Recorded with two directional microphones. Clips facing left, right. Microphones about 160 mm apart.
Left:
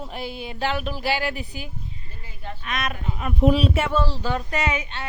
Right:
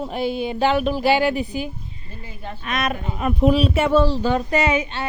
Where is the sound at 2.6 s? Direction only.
40° right (ahead or behind).